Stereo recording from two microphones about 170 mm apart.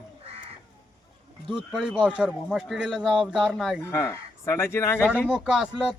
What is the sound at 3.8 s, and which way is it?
Speech, 15° left (ahead or behind).